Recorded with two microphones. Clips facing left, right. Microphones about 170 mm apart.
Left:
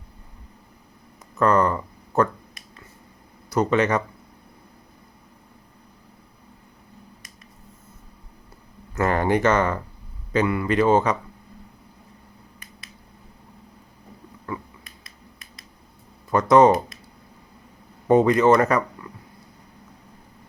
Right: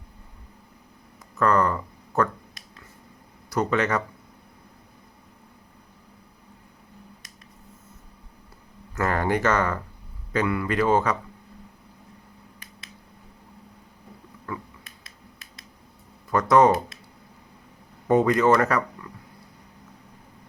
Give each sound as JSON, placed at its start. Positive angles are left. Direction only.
{"t": 1.4, "sound": "speech", "side_deg": 20}
{"t": 3.5, "sound": "speech", "side_deg": 20}
{"t": 9.0, "sound": "speech", "side_deg": 20}
{"t": 14.5, "sound": "a sound", "side_deg": 20}
{"t": 14.8, "sound": "a sound", "side_deg": 0}
{"t": 16.3, "sound": "speech", "side_deg": 20}
{"t": 18.1, "sound": "speech", "side_deg": 20}